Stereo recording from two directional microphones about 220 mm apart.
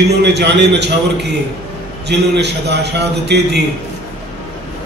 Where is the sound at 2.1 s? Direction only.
50° right (ahead or behind).